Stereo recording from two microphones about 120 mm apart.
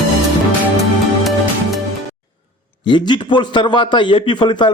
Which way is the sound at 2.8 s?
40° left (ahead or behind).